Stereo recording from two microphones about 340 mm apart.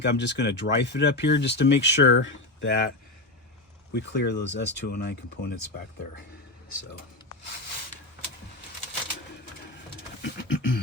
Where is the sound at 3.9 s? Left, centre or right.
Left.